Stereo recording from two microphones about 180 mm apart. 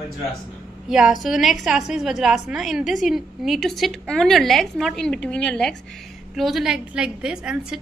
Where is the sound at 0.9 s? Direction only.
5° right (ahead or behind).